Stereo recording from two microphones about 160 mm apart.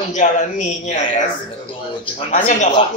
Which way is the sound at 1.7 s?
35° left (ahead or behind).